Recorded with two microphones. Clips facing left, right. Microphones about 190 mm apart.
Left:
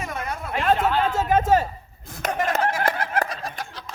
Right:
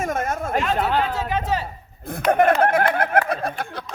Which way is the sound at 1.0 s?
45° left (ahead or behind).